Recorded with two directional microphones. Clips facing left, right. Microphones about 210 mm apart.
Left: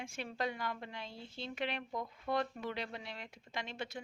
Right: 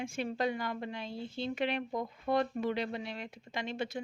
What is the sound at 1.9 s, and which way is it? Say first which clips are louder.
Speech: right 4 dB; 25° right (ahead or behind).